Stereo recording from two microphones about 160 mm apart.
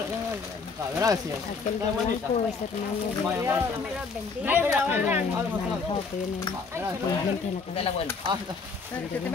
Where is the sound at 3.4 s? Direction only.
15° right (ahead or behind).